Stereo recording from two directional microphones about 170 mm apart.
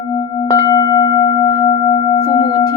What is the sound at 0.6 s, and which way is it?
Singing bowl, 20° left (ahead or behind).